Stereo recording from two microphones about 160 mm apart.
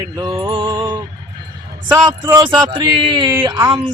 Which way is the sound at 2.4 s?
30° right (ahead or behind).